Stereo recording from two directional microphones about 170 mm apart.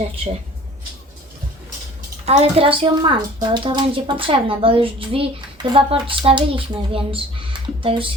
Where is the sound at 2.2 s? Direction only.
35° right (ahead or behind).